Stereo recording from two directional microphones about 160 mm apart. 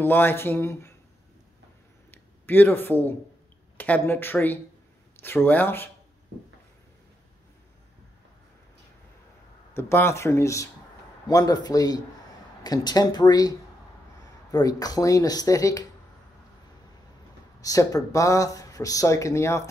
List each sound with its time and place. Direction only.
0.0 s speech: 15° left (ahead or behind)
2.0 s a sound: 10° left (ahead or behind)
3.7 s speech: 10° left (ahead or behind)
9.8 s speech: 15° left (ahead or behind)
17.6 s speech: 20° left (ahead or behind)